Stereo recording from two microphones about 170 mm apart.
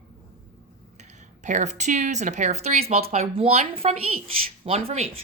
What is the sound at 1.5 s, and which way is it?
Speech, 45° right (ahead or behind).